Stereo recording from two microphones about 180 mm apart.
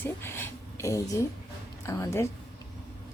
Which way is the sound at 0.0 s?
15° left (ahead or behind).